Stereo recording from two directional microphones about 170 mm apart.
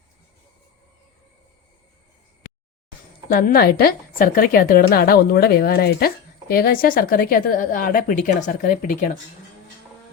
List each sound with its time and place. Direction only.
3.2 s a woman's voice: 60° left (ahead or behind)